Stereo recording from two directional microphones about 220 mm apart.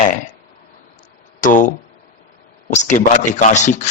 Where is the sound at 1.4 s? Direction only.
35° left (ahead or behind).